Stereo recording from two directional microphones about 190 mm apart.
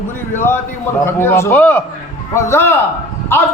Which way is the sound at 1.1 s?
15° left (ahead or behind).